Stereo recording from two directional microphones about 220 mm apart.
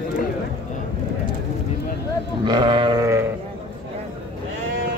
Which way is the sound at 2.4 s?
20° right (ahead or behind).